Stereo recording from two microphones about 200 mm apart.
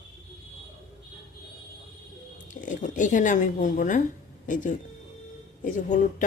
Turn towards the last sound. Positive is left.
turn(degrees=40)  # may be behind; listen again after turning